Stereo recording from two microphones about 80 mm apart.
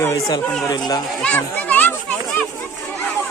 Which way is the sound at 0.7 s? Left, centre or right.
Left.